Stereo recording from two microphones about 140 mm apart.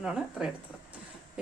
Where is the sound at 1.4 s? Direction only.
5° right (ahead or behind).